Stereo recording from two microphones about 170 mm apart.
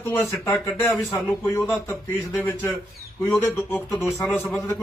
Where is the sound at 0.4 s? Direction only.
15° left (ahead or behind).